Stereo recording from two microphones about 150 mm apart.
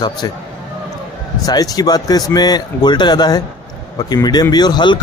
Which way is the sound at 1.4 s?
25° left (ahead or behind).